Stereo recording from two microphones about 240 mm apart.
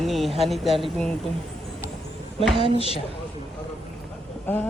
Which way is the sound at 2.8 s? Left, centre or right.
Left.